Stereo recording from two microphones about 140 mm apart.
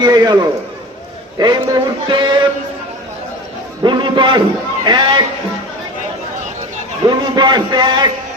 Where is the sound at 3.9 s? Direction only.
35° right (ahead or behind).